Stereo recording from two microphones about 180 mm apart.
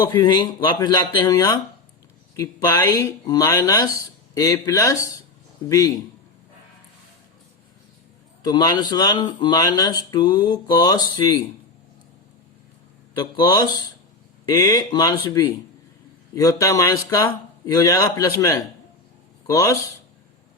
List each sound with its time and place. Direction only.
0.1 s speech: 25° left (ahead or behind)
8.4 s speech: 25° left (ahead or behind)
13.1 s speech: 25° left (ahead or behind)